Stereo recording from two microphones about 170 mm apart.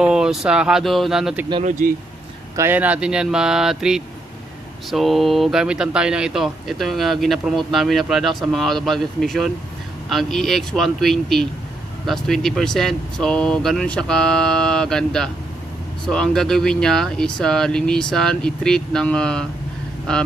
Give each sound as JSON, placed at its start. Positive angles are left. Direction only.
{"t": 0.0, "sound": "speech", "side_deg": -5}
{"t": 1.6, "sound": "speech", "side_deg": -45}
{"t": 2.5, "sound": "speech", "side_deg": -15}